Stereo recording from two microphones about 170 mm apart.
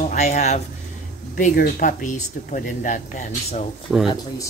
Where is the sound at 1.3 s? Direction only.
55° left (ahead or behind).